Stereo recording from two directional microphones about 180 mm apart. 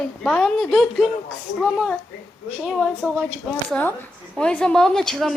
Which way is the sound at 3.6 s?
5° left (ahead or behind).